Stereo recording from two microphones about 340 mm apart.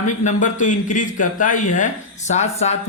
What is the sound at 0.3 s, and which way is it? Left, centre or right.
A man's voice, left.